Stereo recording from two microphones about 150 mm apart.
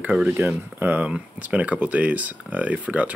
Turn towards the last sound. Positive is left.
turn(degrees=-10)  # may be behind; listen again after turning